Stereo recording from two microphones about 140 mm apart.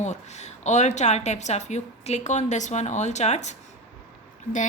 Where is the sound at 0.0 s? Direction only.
55° left (ahead or behind).